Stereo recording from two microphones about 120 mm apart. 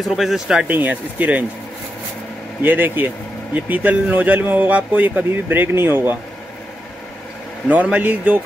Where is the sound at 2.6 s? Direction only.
15° right (ahead or behind).